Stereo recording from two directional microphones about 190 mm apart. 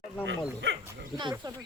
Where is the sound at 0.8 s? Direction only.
20° right (ahead or behind).